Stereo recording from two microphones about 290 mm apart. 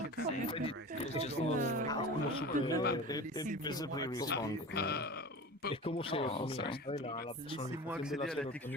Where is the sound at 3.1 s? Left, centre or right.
Centre.